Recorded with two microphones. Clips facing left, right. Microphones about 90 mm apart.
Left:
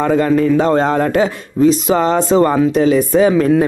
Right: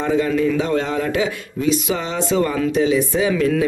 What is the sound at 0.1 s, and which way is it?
Speech, 50° left (ahead or behind).